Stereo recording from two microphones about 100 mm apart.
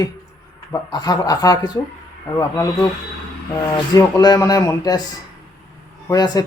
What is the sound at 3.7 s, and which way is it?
Speech, 40° left (ahead or behind).